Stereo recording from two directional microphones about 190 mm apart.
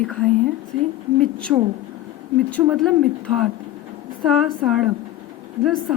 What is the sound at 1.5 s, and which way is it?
Speech, 15° right (ahead or behind).